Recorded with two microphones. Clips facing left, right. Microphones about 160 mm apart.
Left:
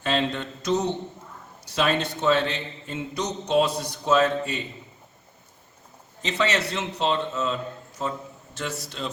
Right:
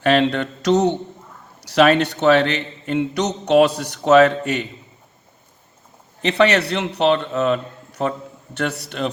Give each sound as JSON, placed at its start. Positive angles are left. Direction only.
{"t": 0.0, "sound": "a man's voice", "side_deg": -65}
{"t": 6.2, "sound": "a man's voice", "side_deg": -65}